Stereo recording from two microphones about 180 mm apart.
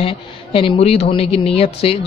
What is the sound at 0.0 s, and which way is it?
Speech, 30° left (ahead or behind).